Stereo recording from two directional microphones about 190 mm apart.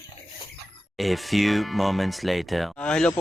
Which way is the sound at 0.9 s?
Centre (ahead or behind).